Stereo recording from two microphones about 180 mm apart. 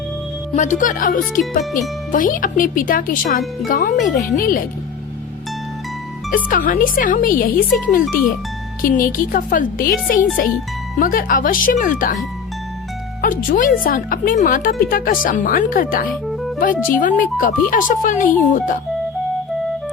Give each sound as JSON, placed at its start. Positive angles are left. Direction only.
{"t": 0.5, "sound": "a woman's voice", "side_deg": 45}
{"t": 6.3, "sound": "a woman's voice", "side_deg": 50}
{"t": 13.2, "sound": "a woman's voice", "side_deg": 50}